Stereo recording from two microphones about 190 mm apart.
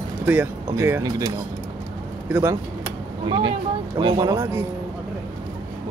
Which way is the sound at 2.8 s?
25° right (ahead or behind).